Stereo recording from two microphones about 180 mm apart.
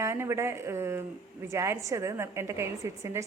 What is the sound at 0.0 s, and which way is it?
A woman's voice, 15° right (ahead or behind).